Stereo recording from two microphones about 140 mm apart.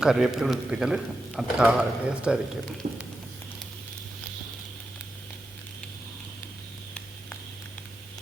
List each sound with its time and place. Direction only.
0.0 s a man's voice: 5° right (ahead or behind)
2.8 s speech: 60° right (ahead or behind)